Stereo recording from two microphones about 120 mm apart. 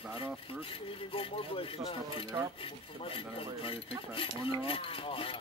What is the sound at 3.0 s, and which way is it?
Speech, 50° left (ahead or behind).